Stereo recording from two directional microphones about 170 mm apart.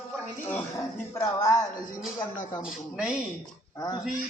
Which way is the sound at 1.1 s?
20° left (ahead or behind).